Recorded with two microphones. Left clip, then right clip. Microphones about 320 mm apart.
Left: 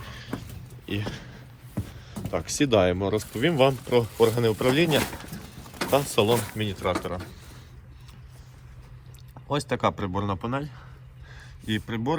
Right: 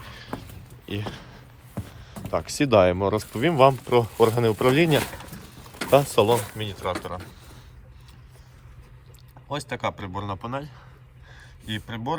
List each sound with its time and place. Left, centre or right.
0.0 s sheep: centre
0.9 s speech: centre
9.5 s speech: centre
11.3 s a sound: centre